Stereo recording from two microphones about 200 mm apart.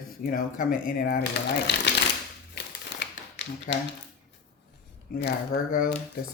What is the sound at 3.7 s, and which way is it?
Speech, 45° left (ahead or behind).